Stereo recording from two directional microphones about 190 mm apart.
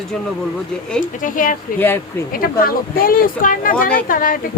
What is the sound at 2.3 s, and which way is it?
Speech, 50° left (ahead or behind).